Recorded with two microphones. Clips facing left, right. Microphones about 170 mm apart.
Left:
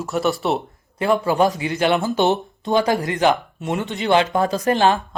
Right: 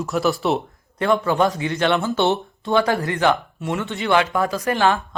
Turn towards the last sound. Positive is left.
turn(degrees=20)  # may be behind; listen again after turning